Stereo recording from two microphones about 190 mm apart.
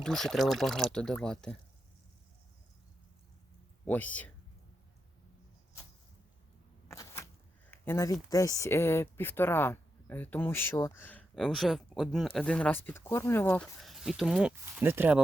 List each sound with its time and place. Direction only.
0.0 s speech: centre (ahead or behind)
3.8 s speech: 5° left (ahead or behind)
6.8 s a sound: 15° left (ahead or behind)
7.7 s speech: 15° left (ahead or behind)
13.8 s speech: centre (ahead or behind)